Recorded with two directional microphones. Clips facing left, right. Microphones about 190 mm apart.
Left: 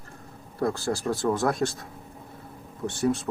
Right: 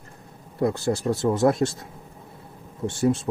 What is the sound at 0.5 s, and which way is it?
Speech, 20° right (ahead or behind).